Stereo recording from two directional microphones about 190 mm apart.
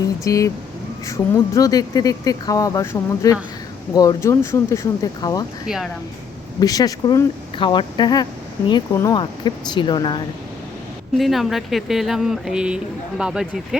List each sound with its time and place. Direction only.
0.3 s speech: 15° left (ahead or behind)
5.6 s speech: centre (ahead or behind)
6.6 s speech: 20° left (ahead or behind)
11.2 s speech: centre (ahead or behind)